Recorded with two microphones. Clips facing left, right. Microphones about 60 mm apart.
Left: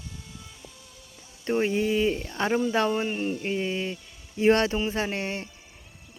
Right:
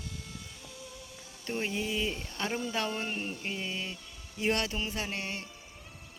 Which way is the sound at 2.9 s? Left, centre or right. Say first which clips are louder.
Left 8 dB; centre.